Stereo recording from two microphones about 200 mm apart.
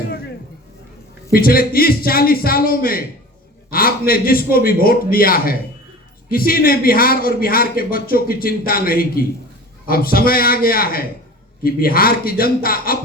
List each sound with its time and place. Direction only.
1.3 s a man's voice: 45° left (ahead or behind)